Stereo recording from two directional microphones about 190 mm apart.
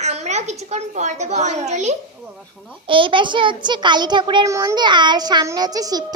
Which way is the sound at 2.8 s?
25° right (ahead or behind).